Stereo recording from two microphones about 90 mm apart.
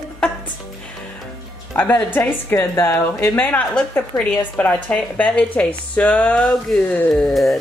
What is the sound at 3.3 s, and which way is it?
A woman's voice, 15° left (ahead or behind).